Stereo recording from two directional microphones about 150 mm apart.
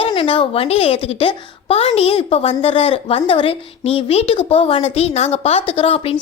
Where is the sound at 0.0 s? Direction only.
35° left (ahead or behind).